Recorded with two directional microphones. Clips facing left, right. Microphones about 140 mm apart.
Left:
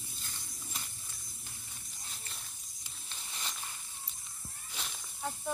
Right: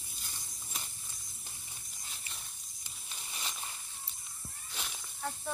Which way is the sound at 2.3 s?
Centre (ahead or behind).